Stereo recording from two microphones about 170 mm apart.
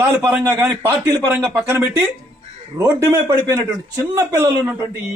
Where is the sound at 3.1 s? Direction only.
20° right (ahead or behind).